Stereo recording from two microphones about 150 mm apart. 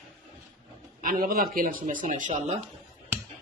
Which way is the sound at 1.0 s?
70° right (ahead or behind).